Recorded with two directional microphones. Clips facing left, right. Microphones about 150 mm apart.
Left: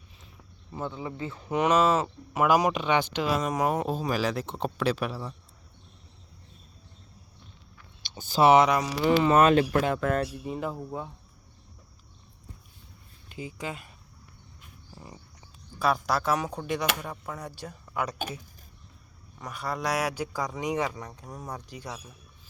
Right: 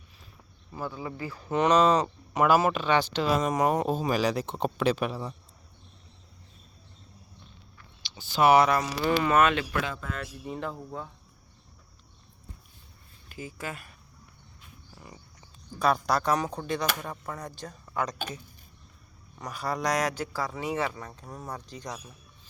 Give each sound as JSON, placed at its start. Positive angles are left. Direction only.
{"t": 0.7, "sound": "speech", "side_deg": 20}
{"t": 3.3, "sound": "speech", "side_deg": 0}
{"t": 8.0, "sound": "a sound", "side_deg": 45}
{"t": 8.4, "sound": "speech", "side_deg": 25}
{"t": 9.3, "sound": "speech", "side_deg": 35}
{"t": 9.9, "sound": "speech", "side_deg": 70}
{"t": 10.4, "sound": "speech", "side_deg": 5}
{"t": 13.2, "sound": "speech", "side_deg": 20}
{"t": 14.9, "sound": "a sound", "side_deg": 25}
{"t": 15.8, "sound": "speech", "side_deg": 0}
{"t": 19.4, "sound": "speech", "side_deg": 0}